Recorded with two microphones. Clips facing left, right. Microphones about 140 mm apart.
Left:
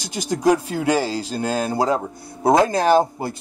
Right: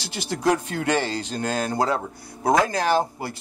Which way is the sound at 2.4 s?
25° left (ahead or behind).